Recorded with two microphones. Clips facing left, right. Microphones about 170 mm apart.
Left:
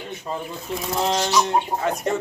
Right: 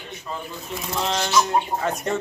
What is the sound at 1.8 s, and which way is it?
Speech, 15° left (ahead or behind).